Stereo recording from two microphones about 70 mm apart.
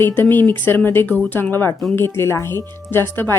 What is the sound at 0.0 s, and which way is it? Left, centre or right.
A woman's voice, left.